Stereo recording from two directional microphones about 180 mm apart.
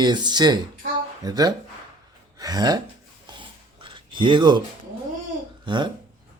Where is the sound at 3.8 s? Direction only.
25° right (ahead or behind).